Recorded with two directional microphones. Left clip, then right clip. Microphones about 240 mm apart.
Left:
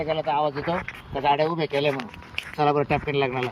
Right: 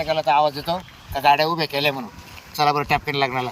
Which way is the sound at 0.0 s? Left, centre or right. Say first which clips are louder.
Right 5 dB; centre.